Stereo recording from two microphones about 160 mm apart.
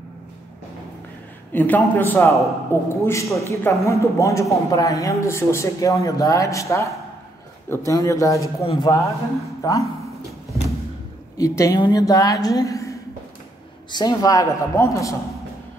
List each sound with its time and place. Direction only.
1.5 s a man's voice: 10° left (ahead or behind)
11.3 s a man's voice: 20° left (ahead or behind)